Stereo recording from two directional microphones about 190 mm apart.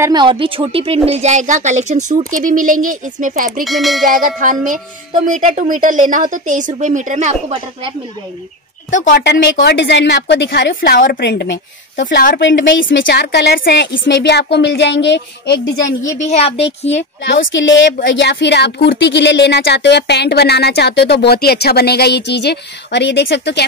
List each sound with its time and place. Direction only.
0.0 s speech: 25° right (ahead or behind); by 3.6 s 45° right (ahead or behind)
3.6 s a sound: centre (ahead or behind)
4.0 s a woman's voice: 45° right (ahead or behind)
9.1 s a woman's voice: 60° left (ahead or behind)
16.1 s a woman's voice: 35° left (ahead or behind)
18.0 s speech: 65° left (ahead or behind)